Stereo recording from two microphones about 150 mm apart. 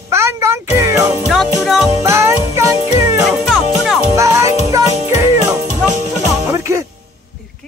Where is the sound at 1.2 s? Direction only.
Centre (ahead or behind).